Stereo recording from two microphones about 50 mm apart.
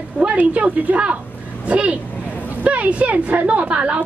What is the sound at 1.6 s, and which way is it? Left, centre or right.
A woman's voice, right.